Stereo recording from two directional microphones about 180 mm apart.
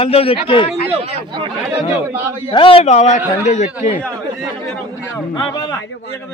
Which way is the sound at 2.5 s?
30° left (ahead or behind).